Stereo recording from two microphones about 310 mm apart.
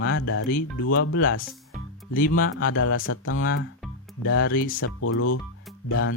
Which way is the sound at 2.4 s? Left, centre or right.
Left.